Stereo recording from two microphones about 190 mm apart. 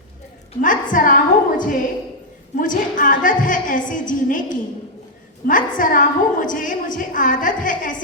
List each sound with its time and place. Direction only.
0.6 s a woman's voice: 45° left (ahead or behind)